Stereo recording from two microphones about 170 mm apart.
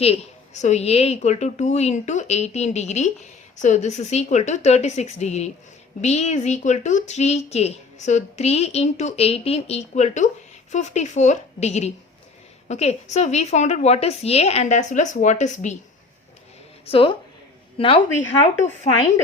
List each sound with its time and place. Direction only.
0.0 s a woman's voice: 40° left (ahead or behind)
16.8 s a woman's voice: 35° left (ahead or behind)
18.6 s speech: 45° left (ahead or behind)